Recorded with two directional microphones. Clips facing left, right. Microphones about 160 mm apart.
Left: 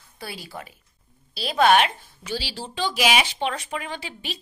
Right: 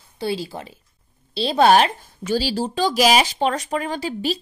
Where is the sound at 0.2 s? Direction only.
25° right (ahead or behind).